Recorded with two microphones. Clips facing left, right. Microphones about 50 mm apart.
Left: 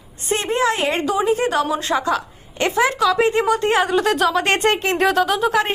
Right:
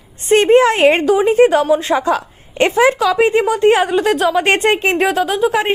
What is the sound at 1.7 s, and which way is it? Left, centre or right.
Speech, right.